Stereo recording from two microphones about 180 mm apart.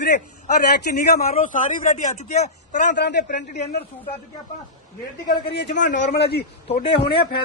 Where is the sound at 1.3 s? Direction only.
45° left (ahead or behind).